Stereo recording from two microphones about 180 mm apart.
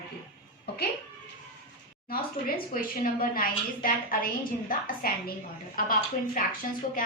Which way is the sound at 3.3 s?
55° left (ahead or behind).